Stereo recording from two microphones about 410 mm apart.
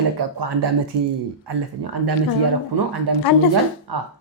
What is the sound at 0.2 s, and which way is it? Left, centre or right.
Speech, right.